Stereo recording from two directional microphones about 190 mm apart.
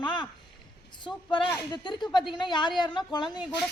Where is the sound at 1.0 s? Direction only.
25° left (ahead or behind).